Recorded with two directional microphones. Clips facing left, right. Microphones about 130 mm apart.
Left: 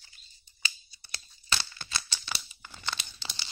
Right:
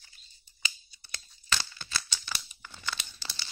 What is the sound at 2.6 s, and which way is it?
Tearing, 20° left (ahead or behind).